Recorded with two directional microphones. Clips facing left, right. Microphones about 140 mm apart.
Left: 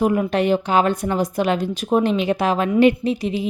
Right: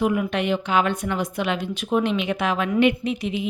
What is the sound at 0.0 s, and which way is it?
Speech, 40° left (ahead or behind).